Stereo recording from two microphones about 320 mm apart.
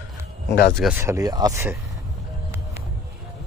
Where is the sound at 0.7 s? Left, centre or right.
Centre.